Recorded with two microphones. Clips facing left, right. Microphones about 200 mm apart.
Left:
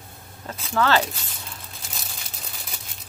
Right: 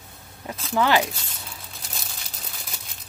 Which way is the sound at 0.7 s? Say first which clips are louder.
Even; 15° right (ahead or behind).